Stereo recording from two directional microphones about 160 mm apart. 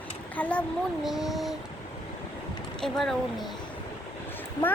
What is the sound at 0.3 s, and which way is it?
Speech, 10° left (ahead or behind).